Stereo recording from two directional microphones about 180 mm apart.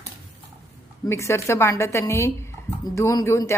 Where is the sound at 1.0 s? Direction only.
15° left (ahead or behind).